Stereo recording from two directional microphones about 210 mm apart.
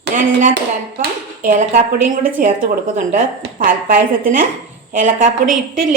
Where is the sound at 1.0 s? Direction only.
35° right (ahead or behind).